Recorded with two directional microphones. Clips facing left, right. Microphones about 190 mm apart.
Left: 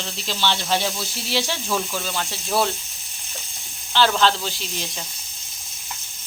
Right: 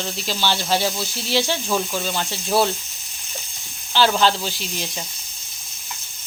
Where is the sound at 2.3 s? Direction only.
5° right (ahead or behind).